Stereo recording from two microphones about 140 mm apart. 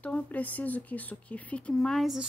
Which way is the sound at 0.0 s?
10° left (ahead or behind).